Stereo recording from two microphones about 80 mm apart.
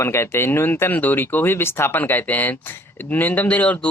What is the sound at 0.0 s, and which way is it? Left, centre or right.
Speech, left.